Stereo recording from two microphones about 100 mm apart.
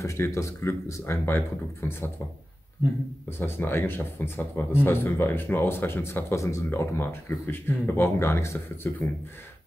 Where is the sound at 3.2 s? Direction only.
25° left (ahead or behind).